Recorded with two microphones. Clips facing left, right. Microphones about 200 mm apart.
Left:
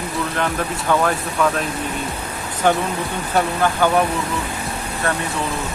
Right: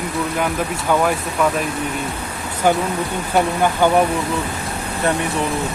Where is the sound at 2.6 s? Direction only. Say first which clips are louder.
Right 1 dB; 10° right (ahead or behind).